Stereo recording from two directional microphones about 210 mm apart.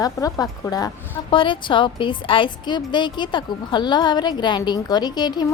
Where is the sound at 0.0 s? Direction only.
15° left (ahead or behind).